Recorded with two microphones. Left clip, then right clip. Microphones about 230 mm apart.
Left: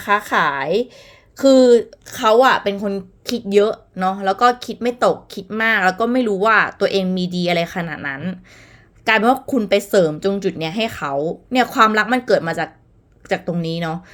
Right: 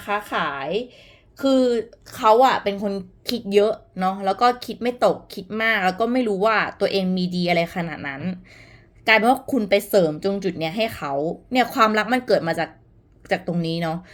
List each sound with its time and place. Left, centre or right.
0.0 s a woman's voice: left; by 14.0 s centre